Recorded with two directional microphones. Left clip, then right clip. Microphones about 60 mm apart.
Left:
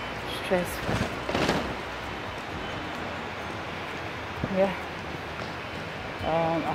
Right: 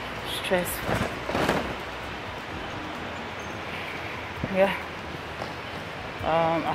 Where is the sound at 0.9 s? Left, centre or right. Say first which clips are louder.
Right 2 dB; centre.